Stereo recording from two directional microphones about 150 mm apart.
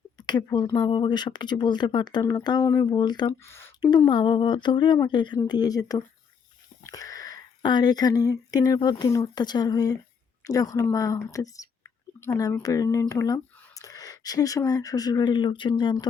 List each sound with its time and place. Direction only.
0.2 s a sound: 30° left (ahead or behind)
0.4 s speech: 20° left (ahead or behind)
3.4 s a sound: 15° left (ahead or behind)
3.8 s speech: 30° left (ahead or behind)
6.8 s wheeze: 25° left (ahead or behind)
7.6 s speech: 30° left (ahead or behind)